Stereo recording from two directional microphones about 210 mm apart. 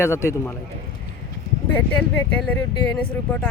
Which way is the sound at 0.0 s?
15° left (ahead or behind).